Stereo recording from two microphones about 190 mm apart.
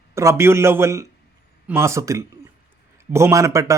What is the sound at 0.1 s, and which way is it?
Speech, 15° right (ahead or behind).